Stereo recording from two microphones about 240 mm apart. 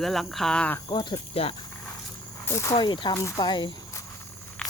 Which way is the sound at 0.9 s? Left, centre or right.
Centre.